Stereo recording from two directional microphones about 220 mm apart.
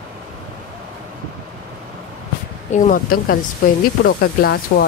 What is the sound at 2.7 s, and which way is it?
Speech, 35° left (ahead or behind).